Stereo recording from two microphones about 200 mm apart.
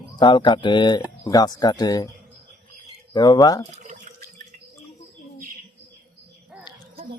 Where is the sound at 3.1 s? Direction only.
20° left (ahead or behind).